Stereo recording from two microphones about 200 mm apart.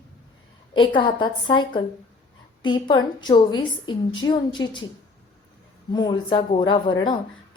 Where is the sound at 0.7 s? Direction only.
25° left (ahead or behind).